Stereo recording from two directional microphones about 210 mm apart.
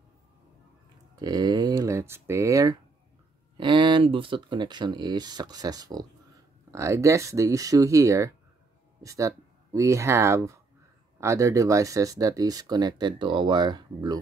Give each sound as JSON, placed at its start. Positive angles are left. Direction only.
{"t": 1.1, "sound": "speech", "side_deg": -20}